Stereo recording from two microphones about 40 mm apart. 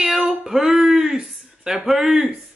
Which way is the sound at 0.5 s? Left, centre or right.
Centre.